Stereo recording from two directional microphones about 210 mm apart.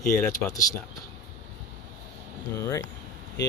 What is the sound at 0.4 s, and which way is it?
Speech, 5° left (ahead or behind).